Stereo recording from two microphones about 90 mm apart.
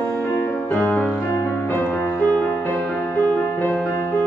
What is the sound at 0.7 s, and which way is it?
Music, 15° left (ahead or behind).